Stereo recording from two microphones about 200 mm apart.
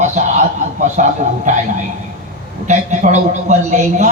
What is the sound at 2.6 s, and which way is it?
A man's voice, 35° right (ahead or behind).